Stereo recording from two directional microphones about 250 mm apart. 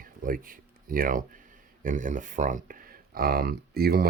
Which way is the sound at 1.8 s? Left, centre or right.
Right.